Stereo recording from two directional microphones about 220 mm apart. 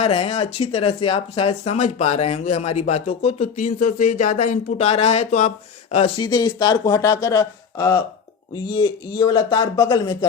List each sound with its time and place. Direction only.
0.0 s speech: 30° left (ahead or behind)
6.1 s a man's voice: 20° left (ahead or behind)